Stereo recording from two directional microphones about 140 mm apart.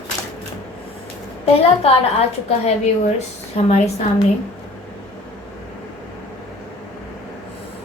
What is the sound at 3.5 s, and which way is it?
Speech, 50° left (ahead or behind).